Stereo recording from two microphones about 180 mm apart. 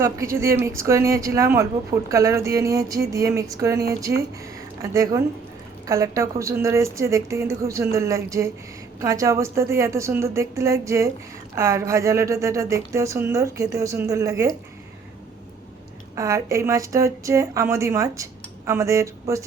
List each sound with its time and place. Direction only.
0.0 s a woman's voice: 15° right (ahead or behind)
16.1 s a woman's voice: 15° right (ahead or behind)